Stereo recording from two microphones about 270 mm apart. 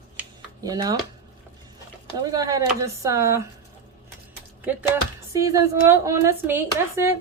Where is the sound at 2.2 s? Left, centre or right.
Centre.